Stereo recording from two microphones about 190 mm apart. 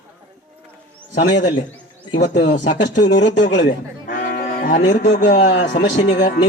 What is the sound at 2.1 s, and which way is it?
Speech, 70° left (ahead or behind).